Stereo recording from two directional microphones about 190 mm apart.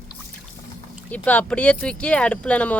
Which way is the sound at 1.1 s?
10° left (ahead or behind).